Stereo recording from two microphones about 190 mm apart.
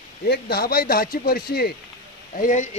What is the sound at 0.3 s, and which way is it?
Speech, 55° left (ahead or behind).